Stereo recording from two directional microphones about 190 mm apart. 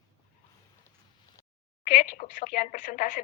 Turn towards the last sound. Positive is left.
turn(degrees=45)  # may be behind; listen again after turning